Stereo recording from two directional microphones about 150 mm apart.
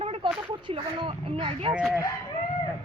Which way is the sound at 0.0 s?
40° right (ahead or behind).